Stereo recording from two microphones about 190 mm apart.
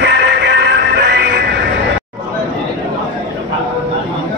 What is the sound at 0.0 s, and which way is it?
Music, 60° right (ahead or behind).